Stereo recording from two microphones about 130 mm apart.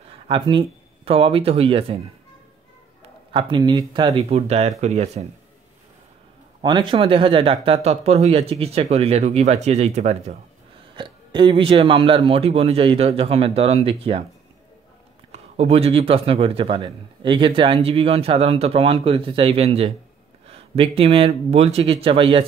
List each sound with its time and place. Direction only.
0.3 s speech: 40° right (ahead or behind)
3.3 s speech: 40° right (ahead or behind)
4.3 s speech: 55° right (ahead or behind)
6.6 s a man's voice: 40° right (ahead or behind); by 10.3 s 60° right (ahead or behind)
11.0 s a man's voice: 40° right (ahead or behind)
15.3 s a man's voice: 50° right (ahead or behind)